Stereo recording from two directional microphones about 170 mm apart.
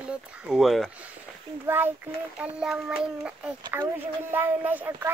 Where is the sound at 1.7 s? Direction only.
10° right (ahead or behind).